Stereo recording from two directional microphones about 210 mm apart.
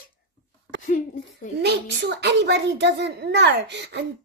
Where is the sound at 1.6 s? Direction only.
55° right (ahead or behind).